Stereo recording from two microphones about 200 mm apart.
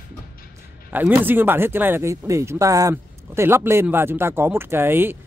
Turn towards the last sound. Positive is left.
turn(degrees=-10)  # may be behind; listen again after turning